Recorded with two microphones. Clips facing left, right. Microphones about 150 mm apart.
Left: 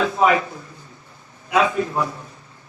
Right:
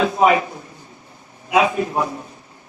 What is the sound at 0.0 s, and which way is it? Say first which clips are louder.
A man's voice: right 2 dB; 25° right (ahead or behind).